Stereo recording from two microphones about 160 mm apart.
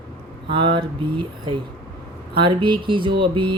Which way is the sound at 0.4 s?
30° right (ahead or behind).